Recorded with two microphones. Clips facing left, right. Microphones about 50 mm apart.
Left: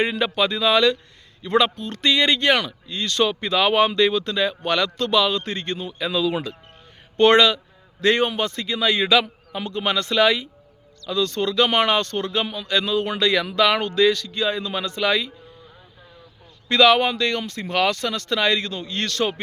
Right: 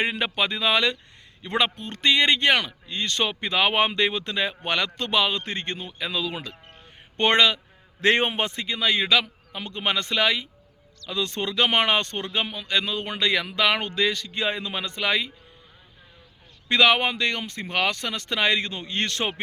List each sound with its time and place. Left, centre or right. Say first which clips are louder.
0.0 s a man's voice: left 4 dB; centre
7.2 s speech: left 5 dB; centre
8.0 s a man's voice: left 2 dB; right
8.5 s speech: left 3 dB; centre
8.8 s a man's voice: left 3 dB; centre
9.7 s speech: left 4 dB; centre
11.1 s speech: left 5 dB; right
14.3 s speech: left 3 dB; right; by 15.3 s centre
16.6 s speech: left 3 dB; centre